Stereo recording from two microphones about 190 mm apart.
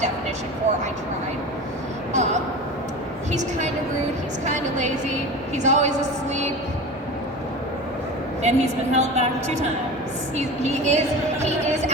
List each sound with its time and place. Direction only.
2.1 s a woman's voice: 35° right (ahead or behind)
4.4 s a woman's voice: 40° right (ahead or behind)
8.4 s a woman's voice: 35° right (ahead or behind)